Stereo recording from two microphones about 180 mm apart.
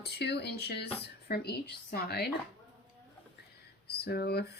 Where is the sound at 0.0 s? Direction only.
65° left (ahead or behind).